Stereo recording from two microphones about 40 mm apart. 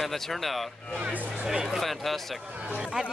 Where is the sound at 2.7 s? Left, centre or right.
Centre.